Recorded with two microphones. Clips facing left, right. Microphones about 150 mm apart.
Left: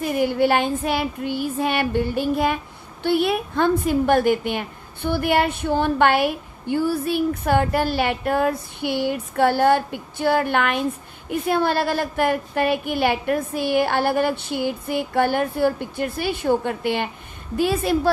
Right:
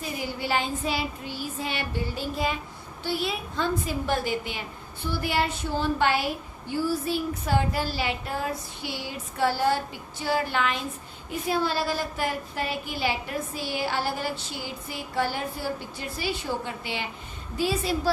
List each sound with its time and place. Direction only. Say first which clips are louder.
0.0 s a woman's voice: left 12 dB; 60° left (ahead or behind)